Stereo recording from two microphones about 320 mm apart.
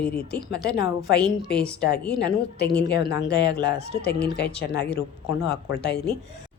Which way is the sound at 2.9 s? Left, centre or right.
Left.